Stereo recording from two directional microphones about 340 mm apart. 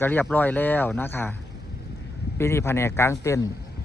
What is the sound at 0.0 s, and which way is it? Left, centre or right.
Speech, centre.